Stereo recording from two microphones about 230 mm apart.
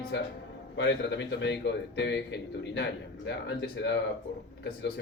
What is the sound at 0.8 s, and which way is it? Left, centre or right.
A man's voice, left.